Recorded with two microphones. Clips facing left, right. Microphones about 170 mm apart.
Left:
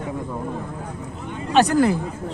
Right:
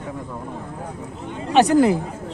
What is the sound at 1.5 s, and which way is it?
Speech, 20° right (ahead or behind).